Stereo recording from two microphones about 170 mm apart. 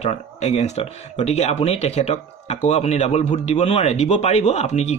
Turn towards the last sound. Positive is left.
turn(degrees=40)  # may be behind; listen again after turning